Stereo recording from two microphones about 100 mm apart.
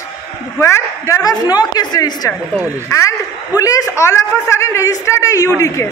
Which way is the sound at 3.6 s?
35° left (ahead or behind).